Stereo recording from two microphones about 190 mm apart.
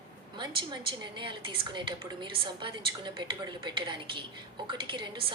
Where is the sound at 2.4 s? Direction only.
25° right (ahead or behind).